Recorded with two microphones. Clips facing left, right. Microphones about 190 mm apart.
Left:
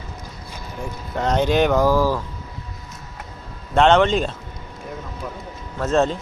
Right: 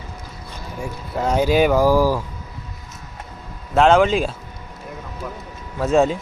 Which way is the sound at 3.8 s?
5° right (ahead or behind).